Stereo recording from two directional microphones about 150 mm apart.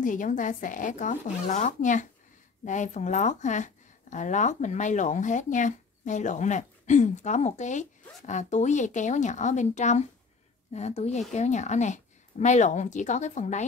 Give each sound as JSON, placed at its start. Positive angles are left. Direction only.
{"t": 0.0, "sound": "a woman's voice", "side_deg": 60}